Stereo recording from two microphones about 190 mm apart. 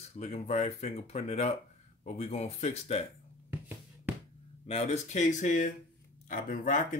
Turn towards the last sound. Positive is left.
turn(degrees=45)  # may be behind; listen again after turning